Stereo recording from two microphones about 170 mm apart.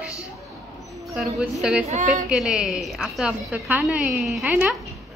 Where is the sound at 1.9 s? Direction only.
45° right (ahead or behind).